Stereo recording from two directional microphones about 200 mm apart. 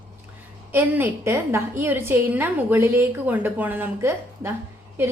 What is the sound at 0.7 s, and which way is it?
A woman's voice, 10° right (ahead or behind).